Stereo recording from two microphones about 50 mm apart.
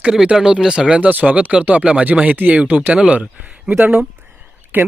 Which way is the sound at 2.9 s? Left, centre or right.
Right.